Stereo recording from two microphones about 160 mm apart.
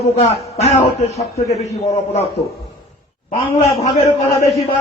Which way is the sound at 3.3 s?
40° left (ahead or behind).